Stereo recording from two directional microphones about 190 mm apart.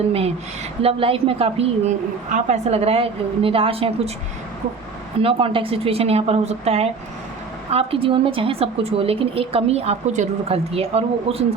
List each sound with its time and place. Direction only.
0.1 s a woman's voice: 30° right (ahead or behind)
5.2 s a woman's voice: 30° right (ahead or behind)